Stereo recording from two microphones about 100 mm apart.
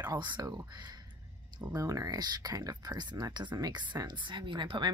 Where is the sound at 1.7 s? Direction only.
35° right (ahead or behind).